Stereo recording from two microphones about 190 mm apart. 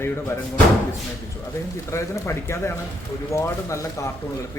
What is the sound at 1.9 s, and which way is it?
A man's voice, 15° left (ahead or behind).